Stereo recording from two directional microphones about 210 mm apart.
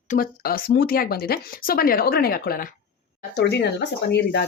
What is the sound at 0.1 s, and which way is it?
Speech, 45° left (ahead or behind).